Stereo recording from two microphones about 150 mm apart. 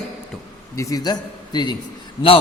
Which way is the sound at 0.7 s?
25° left (ahead or behind).